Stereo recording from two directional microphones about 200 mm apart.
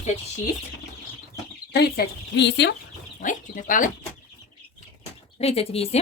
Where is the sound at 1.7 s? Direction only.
55° left (ahead or behind).